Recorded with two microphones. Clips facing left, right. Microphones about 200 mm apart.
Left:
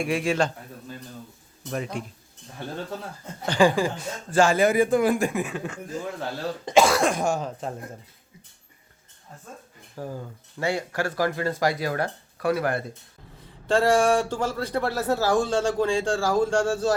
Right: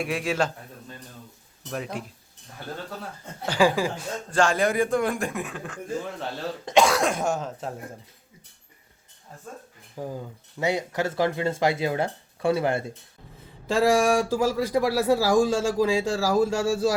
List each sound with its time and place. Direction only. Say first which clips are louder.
0.0 s speech: left 2 dB; centre (ahead or behind)
1.7 s speech: left 2 dB; centre (ahead or behind)
3.4 s speech: left 1 dB; 5° right (ahead or behind)
4.3 s speech: left 3 dB; 5° left (ahead or behind)
9.9 s speech: right 1 dB; 15° right (ahead or behind)
13.4 s speech: even; 5° right (ahead or behind)